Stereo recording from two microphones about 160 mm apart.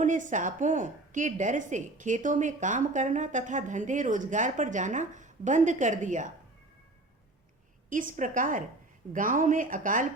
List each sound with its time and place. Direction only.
0.0 s a woman's voice: 50° right (ahead or behind)
7.9 s speech: 55° right (ahead or behind)